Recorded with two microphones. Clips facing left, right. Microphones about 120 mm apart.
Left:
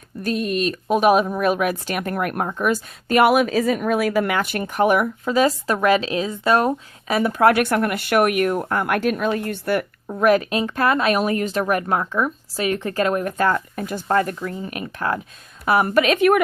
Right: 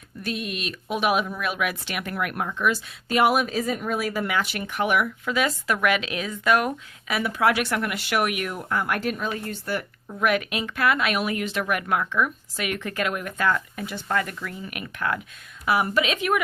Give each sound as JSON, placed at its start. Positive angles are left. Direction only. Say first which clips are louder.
{"t": 0.2, "sound": "speech", "louder": "left 8 dB", "side_deg": 40}
{"t": 4.3, "sound": "a woman's voice", "louder": "left 4 dB", "side_deg": 50}
{"t": 10.2, "sound": "speech", "louder": "left 7 dB", "side_deg": 35}
{"t": 15.6, "sound": "speech", "louder": "left 5 dB", "side_deg": 50}